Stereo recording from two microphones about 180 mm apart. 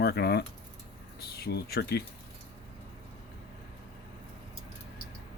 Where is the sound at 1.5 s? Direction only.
60° left (ahead or behind).